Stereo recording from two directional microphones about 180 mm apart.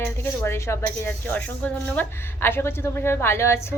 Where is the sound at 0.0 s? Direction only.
15° left (ahead or behind).